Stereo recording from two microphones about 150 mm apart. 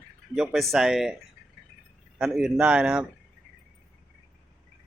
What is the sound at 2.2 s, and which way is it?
Speech, 5° right (ahead or behind).